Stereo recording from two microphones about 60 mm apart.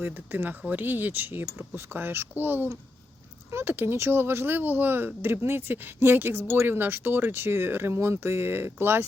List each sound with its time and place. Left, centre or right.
0.0 s speech: right